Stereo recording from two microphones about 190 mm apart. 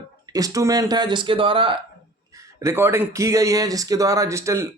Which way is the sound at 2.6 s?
15° right (ahead or behind).